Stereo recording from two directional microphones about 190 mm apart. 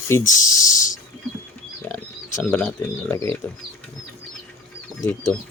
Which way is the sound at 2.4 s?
10° left (ahead or behind).